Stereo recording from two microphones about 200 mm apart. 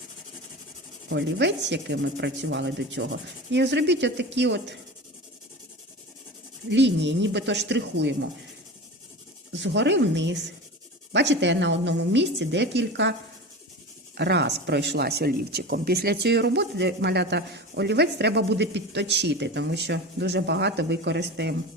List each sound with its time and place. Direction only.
1.1 s speech: 60° right (ahead or behind)
6.7 s speech: 60° right (ahead or behind)
9.5 s speech: 65° right (ahead or behind)
14.2 s speech: 55° right (ahead or behind)